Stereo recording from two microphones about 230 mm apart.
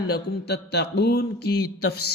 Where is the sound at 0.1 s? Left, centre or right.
Left.